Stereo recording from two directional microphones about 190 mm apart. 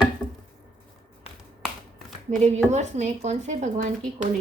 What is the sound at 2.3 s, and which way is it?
Speech, 35° right (ahead or behind).